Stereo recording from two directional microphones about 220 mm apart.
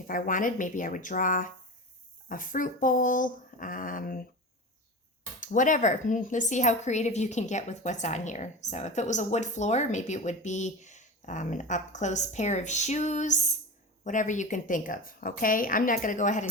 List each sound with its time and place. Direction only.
0.1 s a woman's voice: 35° left (ahead or behind)
5.4 s a woman's voice: 35° left (ahead or behind)